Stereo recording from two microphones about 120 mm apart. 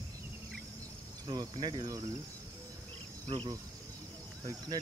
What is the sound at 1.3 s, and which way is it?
Cricket, 35° right (ahead or behind).